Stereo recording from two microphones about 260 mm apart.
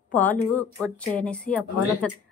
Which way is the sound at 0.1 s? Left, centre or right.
Centre.